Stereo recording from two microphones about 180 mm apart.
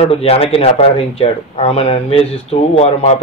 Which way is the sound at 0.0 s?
35° left (ahead or behind).